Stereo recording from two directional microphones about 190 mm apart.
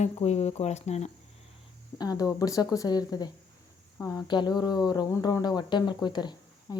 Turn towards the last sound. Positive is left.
turn(degrees=20)  # may be behind; listen again after turning